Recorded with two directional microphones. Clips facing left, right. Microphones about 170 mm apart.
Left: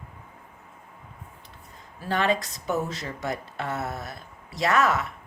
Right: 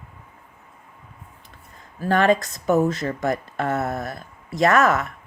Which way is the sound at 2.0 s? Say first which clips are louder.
Right 7 dB; 50° right (ahead or behind).